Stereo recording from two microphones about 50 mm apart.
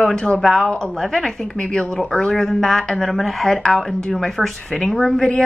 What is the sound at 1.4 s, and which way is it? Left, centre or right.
Speech, centre.